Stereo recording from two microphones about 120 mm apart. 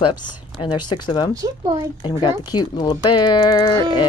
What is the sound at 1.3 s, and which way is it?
Speech, 30° right (ahead or behind).